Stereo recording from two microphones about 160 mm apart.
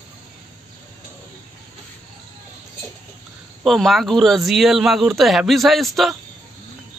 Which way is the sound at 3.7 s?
Centre (ahead or behind).